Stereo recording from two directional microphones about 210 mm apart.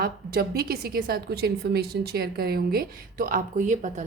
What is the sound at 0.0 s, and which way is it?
A woman's voice, 45° right (ahead or behind).